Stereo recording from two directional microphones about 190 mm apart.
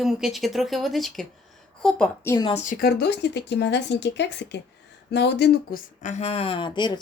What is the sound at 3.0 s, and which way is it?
Speech, 60° left (ahead or behind).